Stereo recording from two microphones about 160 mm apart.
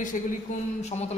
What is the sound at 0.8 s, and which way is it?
Speech, 45° left (ahead or behind).